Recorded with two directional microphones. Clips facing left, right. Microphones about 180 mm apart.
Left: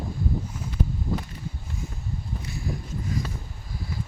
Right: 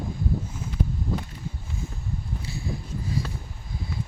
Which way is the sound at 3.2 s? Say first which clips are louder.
Right 2 dB; 30° right (ahead or behind).